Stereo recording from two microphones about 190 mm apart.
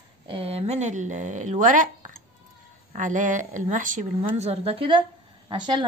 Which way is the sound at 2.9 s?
45° right (ahead or behind).